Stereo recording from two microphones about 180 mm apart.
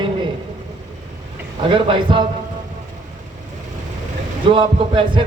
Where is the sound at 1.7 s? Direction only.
30° right (ahead or behind).